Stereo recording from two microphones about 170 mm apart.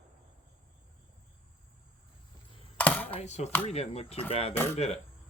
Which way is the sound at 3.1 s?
40° left (ahead or behind).